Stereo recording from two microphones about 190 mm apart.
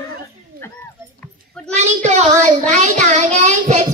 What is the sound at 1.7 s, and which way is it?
Speech, 35° right (ahead or behind).